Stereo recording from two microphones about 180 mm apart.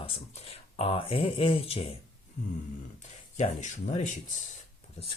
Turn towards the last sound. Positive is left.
turn(degrees=40)  # may be behind; listen again after turning